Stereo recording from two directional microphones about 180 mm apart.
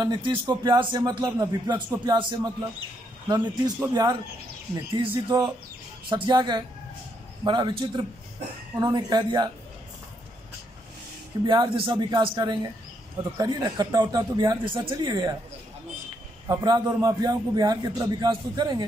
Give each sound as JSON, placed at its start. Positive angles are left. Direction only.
{"t": 0.0, "sound": "speech", "side_deg": -25}
{"t": 11.4, "sound": "speech", "side_deg": -25}
{"t": 16.4, "sound": "speech", "side_deg": -20}